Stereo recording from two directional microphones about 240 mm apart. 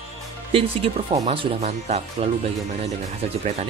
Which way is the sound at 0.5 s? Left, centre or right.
Right.